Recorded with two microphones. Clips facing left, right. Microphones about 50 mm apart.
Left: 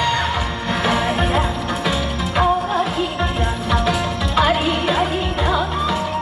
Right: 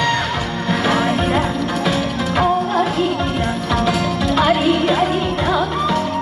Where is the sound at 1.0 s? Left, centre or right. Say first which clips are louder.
Right 1 dB; centre.